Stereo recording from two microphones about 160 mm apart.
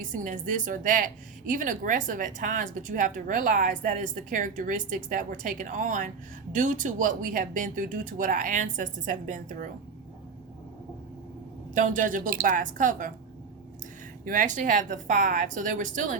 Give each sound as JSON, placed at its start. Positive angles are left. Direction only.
{"t": 0.0, "sound": "a woman's voice", "side_deg": -55}
{"t": 11.7, "sound": "a woman's voice", "side_deg": -55}
{"t": 14.3, "sound": "speech", "side_deg": -55}